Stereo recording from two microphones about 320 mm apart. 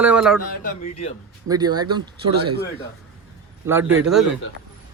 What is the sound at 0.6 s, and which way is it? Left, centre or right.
Speech, left.